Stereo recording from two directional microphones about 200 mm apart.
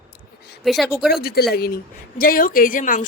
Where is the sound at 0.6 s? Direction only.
Centre (ahead or behind).